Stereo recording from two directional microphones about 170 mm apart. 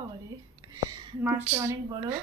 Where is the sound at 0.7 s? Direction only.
20° right (ahead or behind).